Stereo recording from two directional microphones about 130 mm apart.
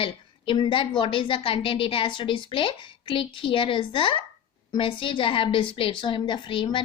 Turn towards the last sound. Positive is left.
turn(degrees=40)  # may be behind; listen again after turning